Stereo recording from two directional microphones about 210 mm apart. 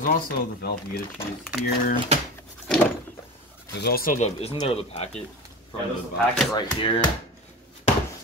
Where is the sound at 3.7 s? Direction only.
45° left (ahead or behind); by 5.1 s 30° left (ahead or behind).